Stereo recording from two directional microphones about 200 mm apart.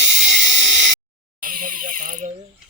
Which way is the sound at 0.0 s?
65° right (ahead or behind).